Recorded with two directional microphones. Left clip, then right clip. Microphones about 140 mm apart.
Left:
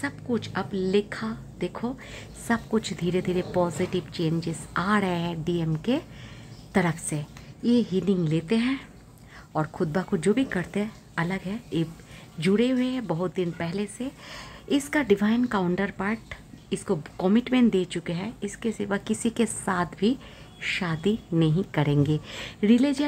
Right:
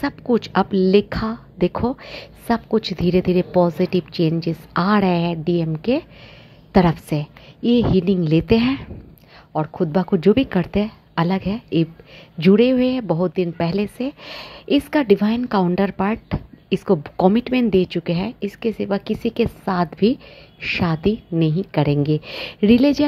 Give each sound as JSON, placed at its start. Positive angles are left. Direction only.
{"t": 0.0, "sound": "a woman's voice", "side_deg": -40}
{"t": 2.4, "sound": "a woman's voice", "side_deg": -25}
{"t": 9.5, "sound": "a woman's voice", "side_deg": -15}
{"t": 13.4, "sound": "speech", "side_deg": -35}